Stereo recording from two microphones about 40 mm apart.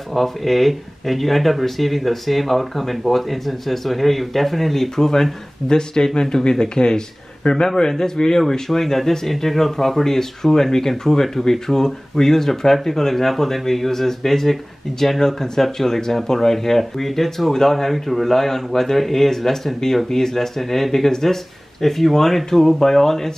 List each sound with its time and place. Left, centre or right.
0.1 s speech: centre